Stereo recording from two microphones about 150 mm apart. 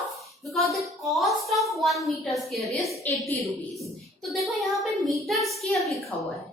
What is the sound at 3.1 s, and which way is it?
Speech, 10° left (ahead or behind).